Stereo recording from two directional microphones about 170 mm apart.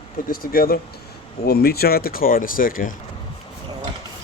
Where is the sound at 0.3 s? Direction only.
60° left (ahead or behind).